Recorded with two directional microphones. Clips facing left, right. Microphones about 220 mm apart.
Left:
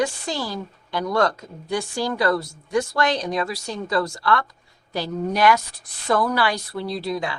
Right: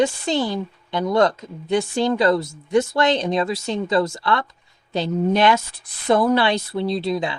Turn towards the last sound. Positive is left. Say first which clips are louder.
# right 4 dB
turn(degrees=-25)  # may be behind; listen again after turning